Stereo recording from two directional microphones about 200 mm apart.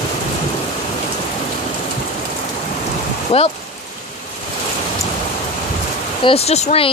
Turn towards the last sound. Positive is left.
turn(degrees=30)  # may be behind; listen again after turning